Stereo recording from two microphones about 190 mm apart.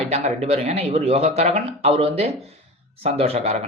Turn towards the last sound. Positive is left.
turn(degrees=-35)  # may be behind; listen again after turning